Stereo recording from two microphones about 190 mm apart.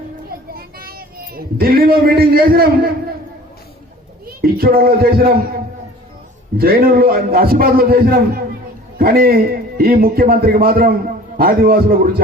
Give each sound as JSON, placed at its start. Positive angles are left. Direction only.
{"t": 0.5, "sound": "a man's voice", "side_deg": -50}
{"t": 4.3, "sound": "speech", "side_deg": -50}
{"t": 6.6, "sound": "a man's voice", "side_deg": -50}